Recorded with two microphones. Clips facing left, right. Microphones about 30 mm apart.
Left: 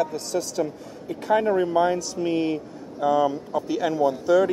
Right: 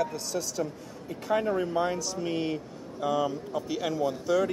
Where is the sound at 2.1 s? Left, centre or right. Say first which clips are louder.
Left 6 dB; centre.